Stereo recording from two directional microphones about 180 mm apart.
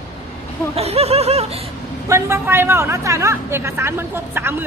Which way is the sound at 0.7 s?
35° right (ahead or behind).